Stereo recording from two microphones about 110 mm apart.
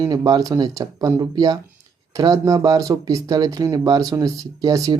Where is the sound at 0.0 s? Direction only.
40° right (ahead or behind).